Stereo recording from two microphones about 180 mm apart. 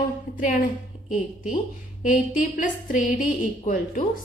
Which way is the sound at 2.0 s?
45° left (ahead or behind).